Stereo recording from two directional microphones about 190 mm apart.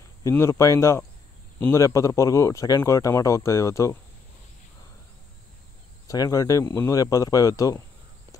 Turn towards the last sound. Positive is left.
turn(degrees=20)  # may be behind; listen again after turning